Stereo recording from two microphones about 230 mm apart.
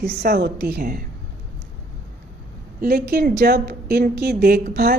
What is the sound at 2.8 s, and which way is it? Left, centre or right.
A woman's voice, right.